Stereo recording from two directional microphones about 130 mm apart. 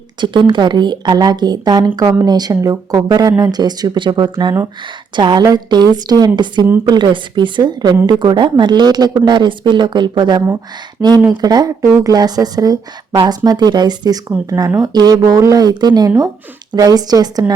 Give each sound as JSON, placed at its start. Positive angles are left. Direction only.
{"t": 0.2, "sound": "a woman's voice", "side_deg": -35}